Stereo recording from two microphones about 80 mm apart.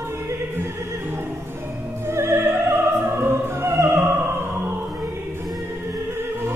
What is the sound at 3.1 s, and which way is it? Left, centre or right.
Opera, right.